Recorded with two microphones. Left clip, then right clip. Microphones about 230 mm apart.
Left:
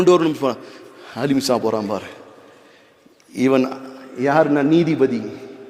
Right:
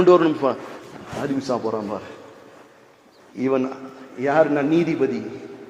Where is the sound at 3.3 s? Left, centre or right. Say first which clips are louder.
Left 5 dB; left.